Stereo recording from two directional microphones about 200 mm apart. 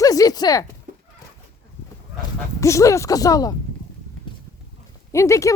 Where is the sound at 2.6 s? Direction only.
15° left (ahead or behind).